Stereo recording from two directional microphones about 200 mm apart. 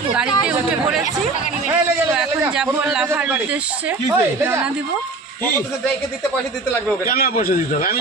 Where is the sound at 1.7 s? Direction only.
10° right (ahead or behind).